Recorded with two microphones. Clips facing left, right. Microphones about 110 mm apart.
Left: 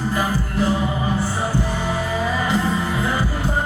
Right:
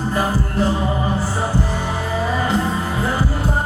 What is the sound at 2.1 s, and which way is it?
Music, 35° right (ahead or behind).